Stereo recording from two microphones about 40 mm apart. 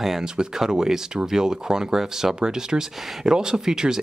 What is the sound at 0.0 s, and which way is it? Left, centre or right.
Speech, centre.